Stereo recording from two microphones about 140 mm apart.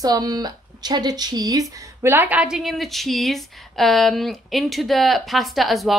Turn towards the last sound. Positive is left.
turn(degrees=0)  # may be behind; listen again after turning